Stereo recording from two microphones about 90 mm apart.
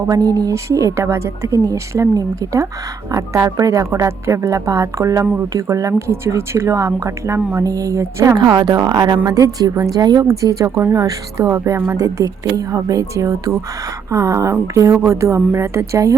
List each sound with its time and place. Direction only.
0.1 s a woman's voice: 45° right (ahead or behind)
7.6 s a woman's voice: 40° right (ahead or behind)